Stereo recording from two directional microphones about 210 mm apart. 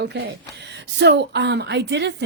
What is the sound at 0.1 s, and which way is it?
A woman's voice, 55° right (ahead or behind).